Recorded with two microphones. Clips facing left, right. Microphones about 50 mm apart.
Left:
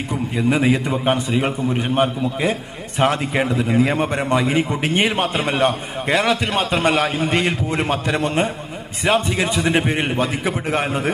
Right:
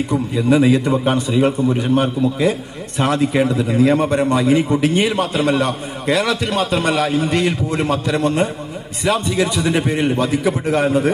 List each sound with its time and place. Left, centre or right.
1.4 s a man's voice: left